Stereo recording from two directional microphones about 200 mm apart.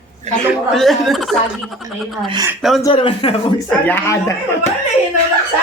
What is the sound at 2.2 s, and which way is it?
Speech, 20° right (ahead or behind).